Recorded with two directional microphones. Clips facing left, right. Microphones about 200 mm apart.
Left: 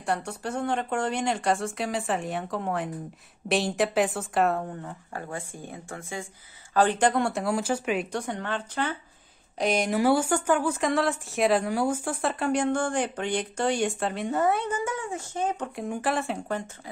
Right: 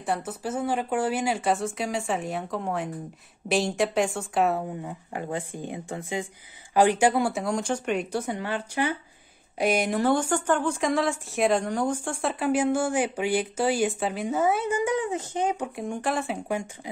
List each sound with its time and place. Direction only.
0.0 s speech: centre (ahead or behind)
4.8 s speech: 20° right (ahead or behind)
9.9 s speech: 10° left (ahead or behind)
14.9 s speech: 20° right (ahead or behind)
15.7 s speech: centre (ahead or behind)
16.4 s speech: 10° right (ahead or behind)